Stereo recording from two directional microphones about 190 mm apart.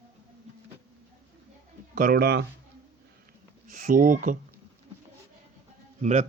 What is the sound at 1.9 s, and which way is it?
Speech, 50° right (ahead or behind).